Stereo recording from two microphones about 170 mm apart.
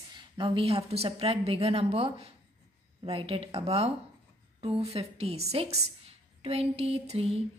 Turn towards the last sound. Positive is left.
turn(degrees=-35)  # may be behind; listen again after turning